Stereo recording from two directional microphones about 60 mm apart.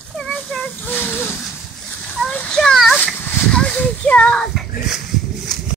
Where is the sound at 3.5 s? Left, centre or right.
Centre.